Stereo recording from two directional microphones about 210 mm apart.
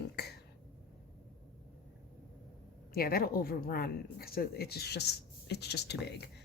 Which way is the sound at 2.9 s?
45° left (ahead or behind).